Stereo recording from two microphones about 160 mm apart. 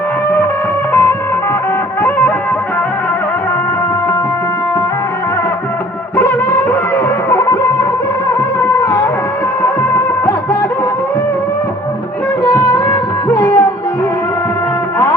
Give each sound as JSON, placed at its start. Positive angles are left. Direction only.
{"t": 2.0, "sound": "music", "side_deg": 15}
{"t": 6.1, "sound": "music of bollywood", "side_deg": 10}
{"t": 7.3, "sound": "music", "side_deg": 15}
{"t": 9.6, "sound": "music of bollywood", "side_deg": 15}
{"t": 12.5, "sound": "music", "side_deg": 20}